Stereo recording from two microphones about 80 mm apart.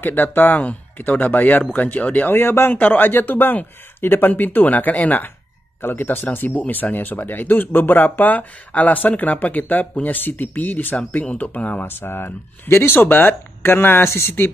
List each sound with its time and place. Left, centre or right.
0.0 s speech: left